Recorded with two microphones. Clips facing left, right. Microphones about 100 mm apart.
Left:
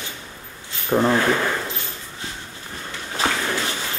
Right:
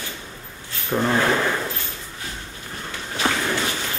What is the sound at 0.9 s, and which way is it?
Speech, 15° left (ahead or behind).